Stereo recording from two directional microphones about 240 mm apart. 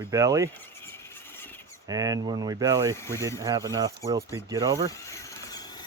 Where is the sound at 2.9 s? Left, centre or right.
Centre.